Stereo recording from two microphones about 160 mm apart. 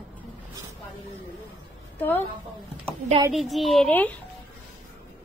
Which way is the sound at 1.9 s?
10° left (ahead or behind).